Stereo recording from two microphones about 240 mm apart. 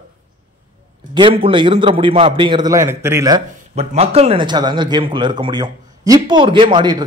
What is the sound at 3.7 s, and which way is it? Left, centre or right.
Speech, right.